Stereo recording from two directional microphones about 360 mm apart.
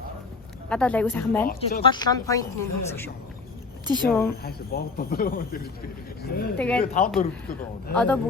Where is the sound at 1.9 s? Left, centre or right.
Centre.